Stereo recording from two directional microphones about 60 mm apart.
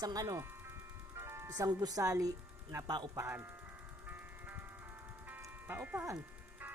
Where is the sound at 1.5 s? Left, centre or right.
Right.